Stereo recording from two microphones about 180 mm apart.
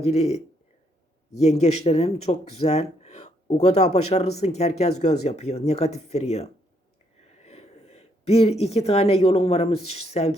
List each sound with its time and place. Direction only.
0.0 s speech: 35° left (ahead or behind)